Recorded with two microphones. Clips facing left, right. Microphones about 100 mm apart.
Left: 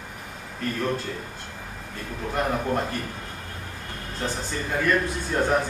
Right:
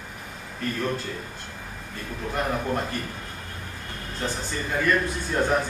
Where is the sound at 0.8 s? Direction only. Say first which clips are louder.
Left 2 dB; centre (ahead or behind).